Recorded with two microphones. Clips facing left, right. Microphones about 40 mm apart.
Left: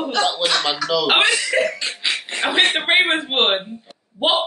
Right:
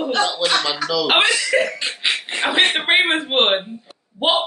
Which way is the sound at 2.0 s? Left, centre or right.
Centre.